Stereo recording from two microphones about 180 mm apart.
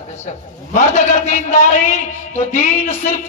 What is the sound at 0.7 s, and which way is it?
A man's voice, 40° left (ahead or behind).